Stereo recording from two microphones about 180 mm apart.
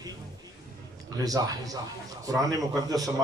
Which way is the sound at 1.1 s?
20° right (ahead or behind).